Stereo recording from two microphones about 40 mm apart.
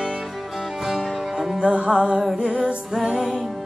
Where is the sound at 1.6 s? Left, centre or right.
Right.